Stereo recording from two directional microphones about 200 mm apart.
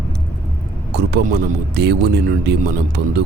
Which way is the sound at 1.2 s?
50° right (ahead or behind).